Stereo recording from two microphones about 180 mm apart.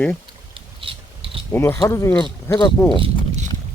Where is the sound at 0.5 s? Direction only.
30° right (ahead or behind).